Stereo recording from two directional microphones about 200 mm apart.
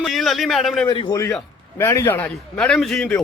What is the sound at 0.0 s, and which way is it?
Speech, centre (ahead or behind).